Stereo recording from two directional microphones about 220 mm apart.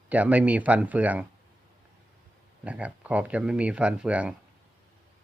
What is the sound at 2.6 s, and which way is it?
Speech, 5° right (ahead or behind).